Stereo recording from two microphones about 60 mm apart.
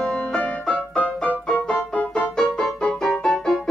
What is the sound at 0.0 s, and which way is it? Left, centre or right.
Music, centre.